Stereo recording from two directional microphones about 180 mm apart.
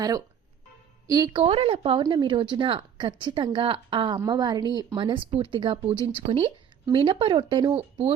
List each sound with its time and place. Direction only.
1.0 s speech: 20° right (ahead or behind)